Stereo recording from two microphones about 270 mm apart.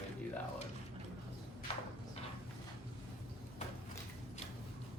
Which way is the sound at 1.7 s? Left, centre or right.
Left.